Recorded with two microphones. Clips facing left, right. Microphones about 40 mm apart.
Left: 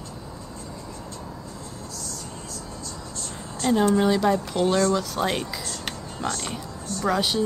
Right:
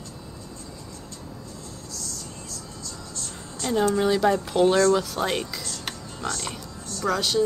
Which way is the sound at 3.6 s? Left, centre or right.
Centre.